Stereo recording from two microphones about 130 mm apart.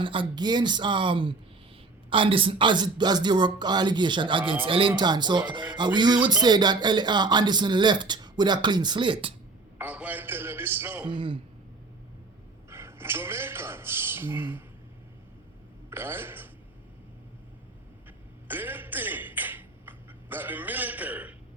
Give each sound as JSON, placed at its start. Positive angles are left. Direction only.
{"t": 0.0, "sound": "speech", "side_deg": -40}
{"t": 9.7, "sound": "a man's voice", "side_deg": -10}
{"t": 11.1, "sound": "speech", "side_deg": -40}
{"t": 12.7, "sound": "a sound", "side_deg": -20}
{"t": 15.9, "sound": "speech", "side_deg": -15}
{"t": 18.4, "sound": "a sound", "side_deg": -15}